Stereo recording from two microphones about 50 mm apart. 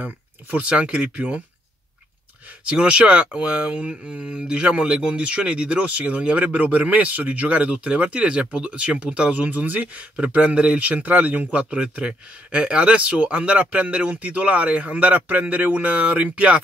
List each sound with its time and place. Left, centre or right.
0.0 s speech: right
2.6 s speech: right